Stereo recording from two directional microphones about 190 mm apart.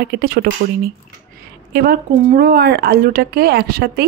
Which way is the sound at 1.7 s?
55° right (ahead or behind).